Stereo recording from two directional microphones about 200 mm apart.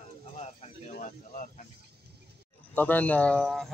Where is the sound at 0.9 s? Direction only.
40° left (ahead or behind).